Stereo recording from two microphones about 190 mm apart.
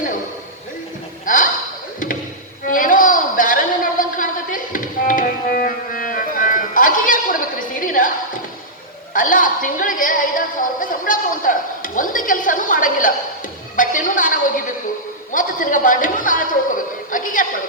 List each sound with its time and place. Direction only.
1.2 s a sound: 45° left (ahead or behind)
2.6 s a sound: 45° left (ahead or behind)
5.6 s music: 45° left (ahead or behind)
9.1 s a woman's voice: 45° left (ahead or behind)
13.7 s music: 45° left (ahead or behind)
15.3 s a man's voice: 45° left (ahead or behind)